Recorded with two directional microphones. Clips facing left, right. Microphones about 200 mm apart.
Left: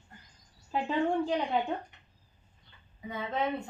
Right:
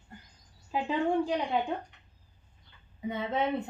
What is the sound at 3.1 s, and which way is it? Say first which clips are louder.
Speech: right 2 dB; 25° right (ahead or behind).